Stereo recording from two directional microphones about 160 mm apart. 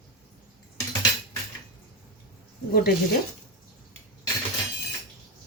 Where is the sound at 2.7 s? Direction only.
70° left (ahead or behind).